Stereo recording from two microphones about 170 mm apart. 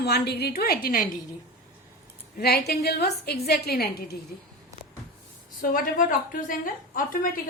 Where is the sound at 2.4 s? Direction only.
70° left (ahead or behind).